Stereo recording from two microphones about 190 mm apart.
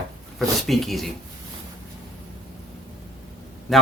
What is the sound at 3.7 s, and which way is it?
Speech, centre (ahead or behind).